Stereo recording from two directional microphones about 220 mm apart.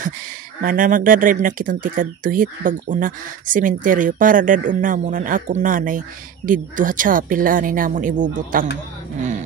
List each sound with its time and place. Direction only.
0.6 s speech: 40° right (ahead or behind)